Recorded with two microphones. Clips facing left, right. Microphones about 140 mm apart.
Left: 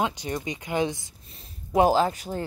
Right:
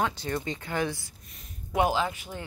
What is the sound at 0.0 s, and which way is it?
Speech, 15° left (ahead or behind).